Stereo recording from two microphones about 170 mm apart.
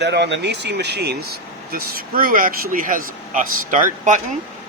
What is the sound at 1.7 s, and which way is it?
A man's voice, 60° right (ahead or behind).